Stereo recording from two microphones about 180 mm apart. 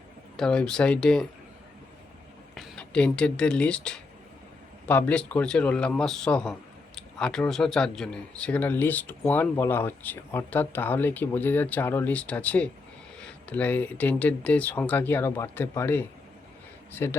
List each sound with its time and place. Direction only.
0.3 s speech: 5° left (ahead or behind)
2.6 s speech: 5° left (ahead or behind)